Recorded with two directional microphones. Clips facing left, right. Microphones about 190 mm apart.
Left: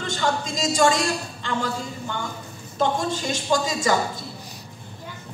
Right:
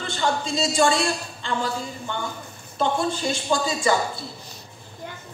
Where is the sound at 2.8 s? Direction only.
40° left (ahead or behind).